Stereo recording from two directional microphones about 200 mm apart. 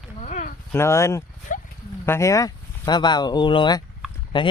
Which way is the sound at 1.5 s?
40° left (ahead or behind).